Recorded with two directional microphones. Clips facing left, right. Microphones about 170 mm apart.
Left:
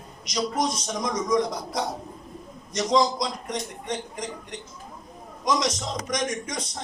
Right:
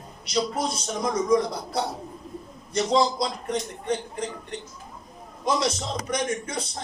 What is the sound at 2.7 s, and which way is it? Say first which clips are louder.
A man's voice: even; 30° right (ahead or behind).